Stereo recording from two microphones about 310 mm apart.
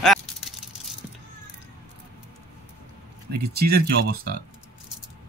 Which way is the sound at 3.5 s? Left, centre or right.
Right.